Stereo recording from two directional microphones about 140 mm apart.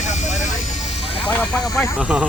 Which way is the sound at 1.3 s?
10° left (ahead or behind).